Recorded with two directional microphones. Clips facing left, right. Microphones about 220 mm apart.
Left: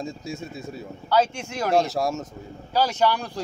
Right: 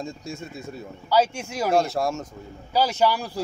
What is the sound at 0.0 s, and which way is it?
Speech, centre (ahead or behind).